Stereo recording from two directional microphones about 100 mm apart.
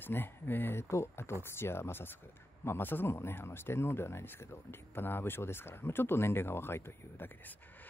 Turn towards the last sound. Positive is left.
turn(degrees=20)  # may be behind; listen again after turning